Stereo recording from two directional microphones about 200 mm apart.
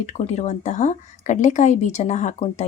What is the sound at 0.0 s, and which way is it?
A woman's voice, 35° left (ahead or behind).